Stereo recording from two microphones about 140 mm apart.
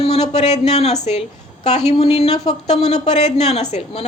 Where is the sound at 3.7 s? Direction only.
50° left (ahead or behind).